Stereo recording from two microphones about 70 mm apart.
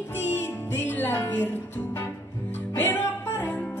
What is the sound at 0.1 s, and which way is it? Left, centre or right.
Music, left.